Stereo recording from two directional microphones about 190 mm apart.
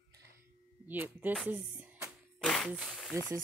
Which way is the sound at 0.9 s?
10° right (ahead or behind).